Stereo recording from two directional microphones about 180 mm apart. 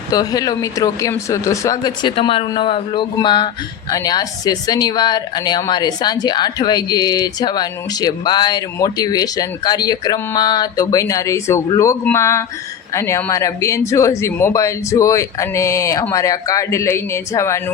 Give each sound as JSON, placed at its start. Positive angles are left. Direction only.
{"t": 0.1, "sound": "speech", "side_deg": 20}